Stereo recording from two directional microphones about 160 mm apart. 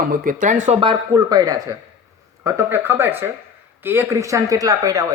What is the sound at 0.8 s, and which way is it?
A woman's voice, 25° right (ahead or behind).